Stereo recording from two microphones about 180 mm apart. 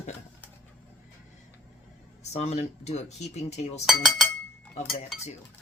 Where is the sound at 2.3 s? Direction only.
35° left (ahead or behind).